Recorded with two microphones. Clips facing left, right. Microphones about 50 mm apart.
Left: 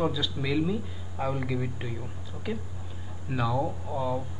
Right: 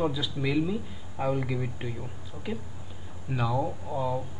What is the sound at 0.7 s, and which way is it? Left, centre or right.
Speech, centre.